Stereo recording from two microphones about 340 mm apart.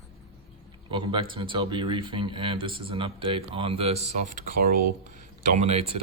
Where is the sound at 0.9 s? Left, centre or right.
Centre.